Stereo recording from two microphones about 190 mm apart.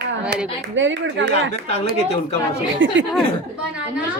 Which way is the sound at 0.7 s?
80° right.